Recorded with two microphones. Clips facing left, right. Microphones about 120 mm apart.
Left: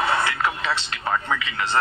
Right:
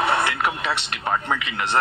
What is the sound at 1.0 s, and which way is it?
Speech, 20° right (ahead or behind).